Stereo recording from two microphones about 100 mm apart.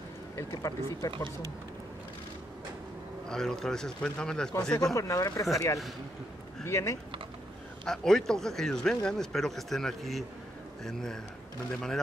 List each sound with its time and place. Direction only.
0.4 s speech: 35° left (ahead or behind)
3.3 s speech: 5° left (ahead or behind)
4.9 s speech: 35° left (ahead or behind)
6.6 s speech: 30° left (ahead or behind)
7.8 s speech: 5° left (ahead or behind)